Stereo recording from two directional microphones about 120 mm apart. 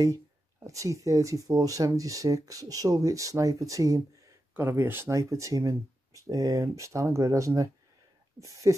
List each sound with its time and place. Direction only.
0.7 s speech: 25° right (ahead or behind)